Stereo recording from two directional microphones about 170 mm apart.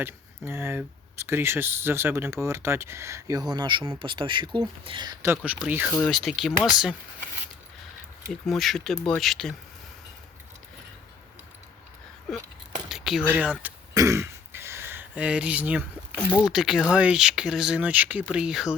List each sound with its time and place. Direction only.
0.0 s speech: 15° right (ahead or behind)
5.4 s speech: 10° right (ahead or behind)
8.3 s speech: centre (ahead or behind)
12.9 s speech: 5° right (ahead or behind)
13.9 s throat clearing: 20° right (ahead or behind)
16.1 s speech: 5° left (ahead or behind)